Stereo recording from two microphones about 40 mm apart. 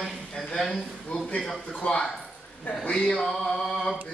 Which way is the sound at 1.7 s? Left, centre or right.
Left.